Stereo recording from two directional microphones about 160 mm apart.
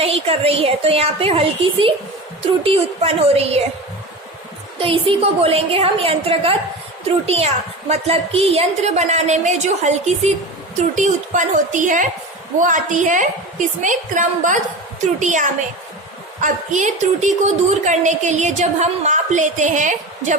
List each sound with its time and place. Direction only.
0.0 s a woman's voice: 40° right (ahead or behind)
4.8 s a woman's voice: 35° right (ahead or behind); by 20.3 s 50° right (ahead or behind)